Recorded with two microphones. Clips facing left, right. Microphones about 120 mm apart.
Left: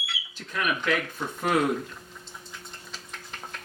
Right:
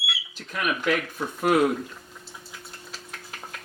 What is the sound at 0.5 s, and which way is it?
Speech, 10° right (ahead or behind).